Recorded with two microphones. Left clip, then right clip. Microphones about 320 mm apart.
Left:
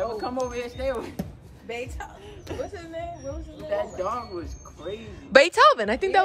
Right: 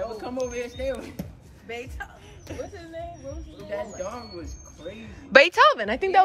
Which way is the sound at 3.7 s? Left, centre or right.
Centre.